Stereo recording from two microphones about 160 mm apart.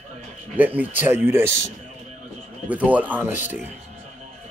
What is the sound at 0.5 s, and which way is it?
Speech, 10° right (ahead or behind).